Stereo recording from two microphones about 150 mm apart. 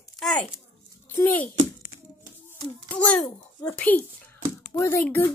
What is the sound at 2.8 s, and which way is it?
A child's voice, 10° left (ahead or behind).